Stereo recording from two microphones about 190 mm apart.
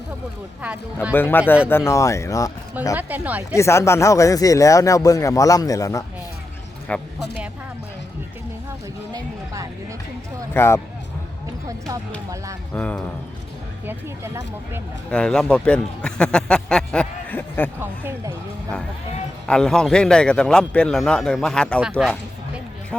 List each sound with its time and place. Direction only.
1.1 s speech: 10° left (ahead or behind)
3.0 s speech: 10° right (ahead or behind)
3.5 s speech: 15° left (ahead or behind)
10.5 s speech: 10° left (ahead or behind)
12.7 s speech: 5° left (ahead or behind)
15.1 s speech: 5° left (ahead or behind)
17.7 s speech: 10° right (ahead or behind)
19.5 s speech: 5° left (ahead or behind)